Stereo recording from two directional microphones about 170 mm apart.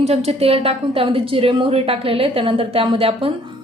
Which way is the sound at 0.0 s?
40° right (ahead or behind).